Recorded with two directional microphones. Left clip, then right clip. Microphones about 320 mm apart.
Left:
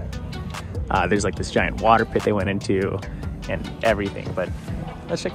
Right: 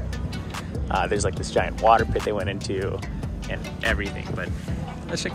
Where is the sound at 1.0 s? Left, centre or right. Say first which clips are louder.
Left 2 dB; centre.